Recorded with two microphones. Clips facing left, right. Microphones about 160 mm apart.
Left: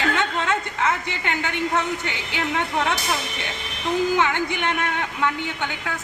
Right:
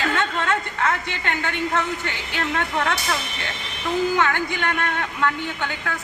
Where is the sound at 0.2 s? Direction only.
15° left (ahead or behind).